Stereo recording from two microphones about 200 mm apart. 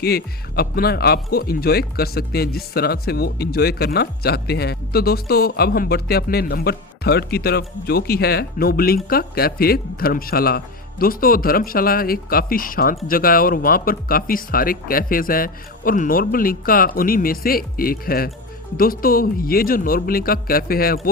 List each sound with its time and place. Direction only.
0.0 s speech: 50° left (ahead or behind)